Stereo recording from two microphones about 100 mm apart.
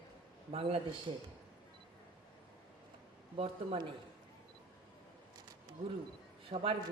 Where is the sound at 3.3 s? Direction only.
75° right (ahead or behind).